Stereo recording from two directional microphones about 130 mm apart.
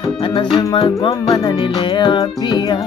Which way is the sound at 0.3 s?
40° left (ahead or behind).